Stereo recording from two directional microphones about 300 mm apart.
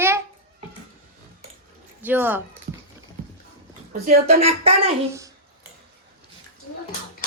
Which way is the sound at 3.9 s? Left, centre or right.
Right.